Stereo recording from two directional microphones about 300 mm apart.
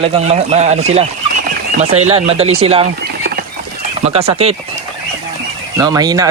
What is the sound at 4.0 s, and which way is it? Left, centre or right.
Speech, right.